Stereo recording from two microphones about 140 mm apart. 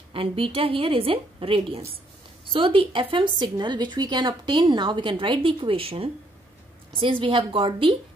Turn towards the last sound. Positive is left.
turn(degrees=-40)  # may be behind; listen again after turning